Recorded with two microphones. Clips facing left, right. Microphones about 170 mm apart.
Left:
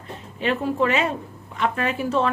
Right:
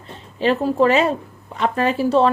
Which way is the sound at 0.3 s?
35° right (ahead or behind).